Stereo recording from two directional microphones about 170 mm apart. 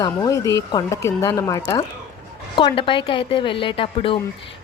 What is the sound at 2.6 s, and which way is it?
A woman's voice, 30° left (ahead or behind).